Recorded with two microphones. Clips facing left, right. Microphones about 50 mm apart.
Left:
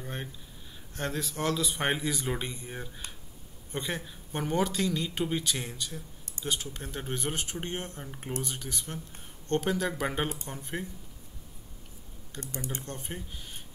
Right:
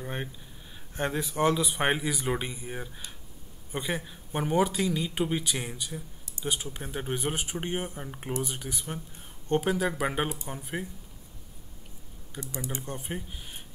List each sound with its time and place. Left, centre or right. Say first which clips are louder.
0.0 s speech: right 3 dB; centre
12.3 s speech: right 2 dB; centre